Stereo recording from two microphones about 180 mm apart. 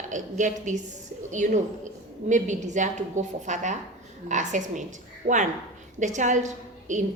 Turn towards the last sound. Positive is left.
turn(degrees=-45)  # may be behind; listen again after turning